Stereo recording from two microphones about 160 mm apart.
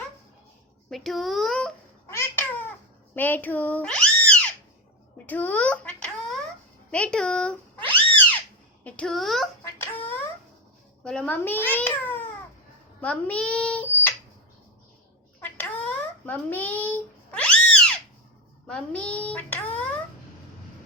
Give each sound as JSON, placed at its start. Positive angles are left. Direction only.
{"t": 0.9, "sound": "a child's voice", "side_deg": 0}
{"t": 2.0, "sound": "cat", "side_deg": 15}
{"t": 3.2, "sound": "speech", "side_deg": 10}
{"t": 5.1, "sound": "a sound", "side_deg": 10}
{"t": 6.9, "sound": "cat", "side_deg": 5}
{"t": 8.8, "sound": "a child's voice", "side_deg": 5}
{"t": 11.0, "sound": "a child's voice", "side_deg": 5}
{"t": 15.4, "sound": "a sound", "side_deg": 10}
{"t": 16.2, "sound": "cat", "side_deg": 10}
{"t": 18.7, "sound": "a child's voice", "side_deg": 5}